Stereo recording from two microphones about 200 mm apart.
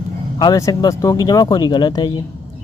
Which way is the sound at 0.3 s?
20° left (ahead or behind).